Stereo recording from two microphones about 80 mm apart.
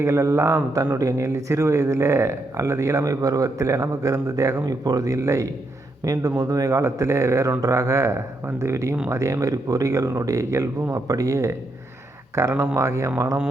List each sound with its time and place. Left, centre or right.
0.0 s speech: right
3.0 s speech: right
4.6 s speech: right
6.1 s speech: right